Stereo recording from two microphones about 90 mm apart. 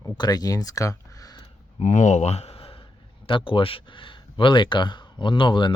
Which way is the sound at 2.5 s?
90° left.